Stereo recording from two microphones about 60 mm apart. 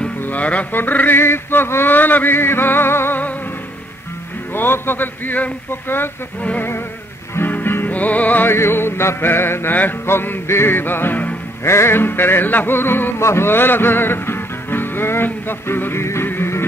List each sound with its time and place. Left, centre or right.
0.2 s music: left
4.6 s music: left
7.3 s music: left
8.5 s music: left
11.6 s music: left